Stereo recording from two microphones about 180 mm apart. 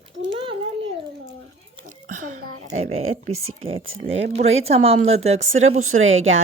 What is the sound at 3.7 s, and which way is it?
Speech, 90° right.